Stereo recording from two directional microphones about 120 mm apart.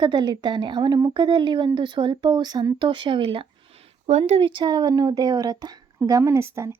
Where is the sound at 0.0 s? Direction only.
35° right (ahead or behind).